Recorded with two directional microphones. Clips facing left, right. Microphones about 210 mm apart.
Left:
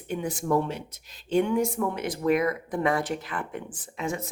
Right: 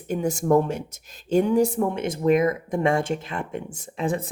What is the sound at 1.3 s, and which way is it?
Speech, 35° right (ahead or behind).